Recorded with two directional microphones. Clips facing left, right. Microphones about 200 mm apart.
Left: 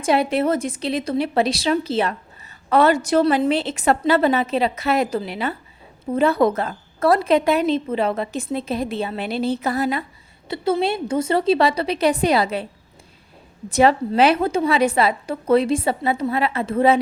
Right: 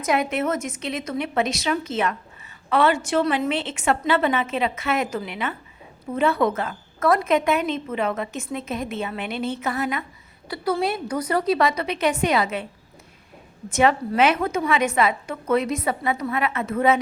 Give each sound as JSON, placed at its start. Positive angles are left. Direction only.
{"t": 0.0, "sound": "a woman's voice", "side_deg": 30}
{"t": 13.7, "sound": "a woman's voice", "side_deg": 35}